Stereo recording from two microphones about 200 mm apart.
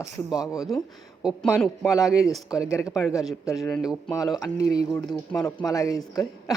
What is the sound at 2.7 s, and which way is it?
Speech, 15° left (ahead or behind).